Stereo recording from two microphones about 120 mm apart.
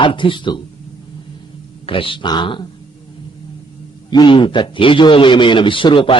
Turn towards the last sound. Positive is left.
turn(degrees=45)  # may be behind; listen again after turning